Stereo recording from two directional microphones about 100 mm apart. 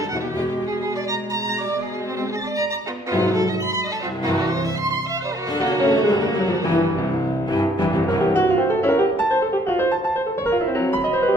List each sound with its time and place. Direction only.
3.1 s violin: 35° right (ahead or behind)
5.9 s music: 40° left (ahead or behind)
7.5 s cello: 45° left (ahead or behind)
8.3 s music: 20° left (ahead or behind)